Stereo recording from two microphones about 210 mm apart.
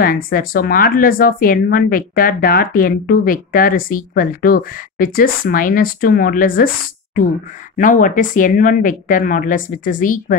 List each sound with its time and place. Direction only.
0.0 s speech: 40° left (ahead or behind)